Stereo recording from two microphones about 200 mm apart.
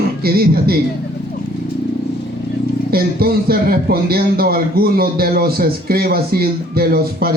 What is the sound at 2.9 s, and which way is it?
A man's voice, 50° right (ahead or behind).